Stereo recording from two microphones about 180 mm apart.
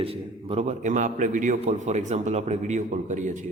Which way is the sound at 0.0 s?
30° right (ahead or behind).